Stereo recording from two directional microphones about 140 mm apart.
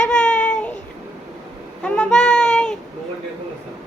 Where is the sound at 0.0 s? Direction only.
5° left (ahead or behind).